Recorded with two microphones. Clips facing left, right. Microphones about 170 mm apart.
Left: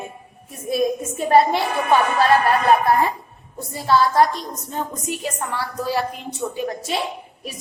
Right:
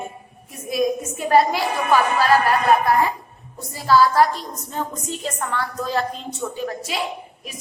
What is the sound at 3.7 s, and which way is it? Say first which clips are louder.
A woman's voice: right 2 dB; 25° left (ahead or behind).